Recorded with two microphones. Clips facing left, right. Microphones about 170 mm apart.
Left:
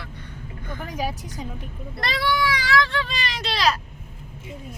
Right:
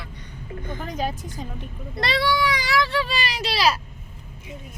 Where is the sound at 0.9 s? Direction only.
10° left (ahead or behind).